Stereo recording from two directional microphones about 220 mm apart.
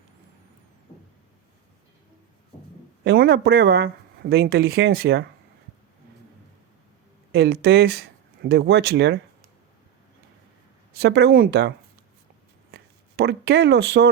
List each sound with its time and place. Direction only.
3.0 s speech: 45° right (ahead or behind)
7.3 s speech: 45° right (ahead or behind)
10.9 s speech: 45° right (ahead or behind)
12.7 s speech: 50° right (ahead or behind)